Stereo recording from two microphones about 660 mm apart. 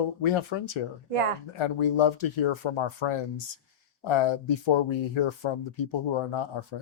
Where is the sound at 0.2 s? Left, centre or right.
Left.